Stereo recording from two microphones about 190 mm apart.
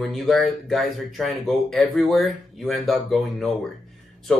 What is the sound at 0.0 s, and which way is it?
Speech, centre (ahead or behind).